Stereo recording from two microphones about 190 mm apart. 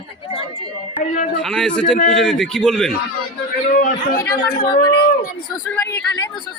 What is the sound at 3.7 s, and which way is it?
Speech, 45° left (ahead or behind).